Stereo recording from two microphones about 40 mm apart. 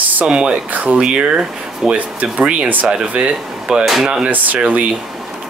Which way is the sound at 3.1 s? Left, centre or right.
Right.